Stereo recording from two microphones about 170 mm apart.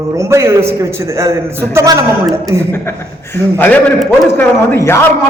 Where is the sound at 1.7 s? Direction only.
20° right (ahead or behind).